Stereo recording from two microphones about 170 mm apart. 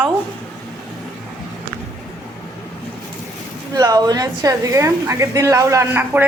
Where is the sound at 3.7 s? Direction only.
20° right (ahead or behind).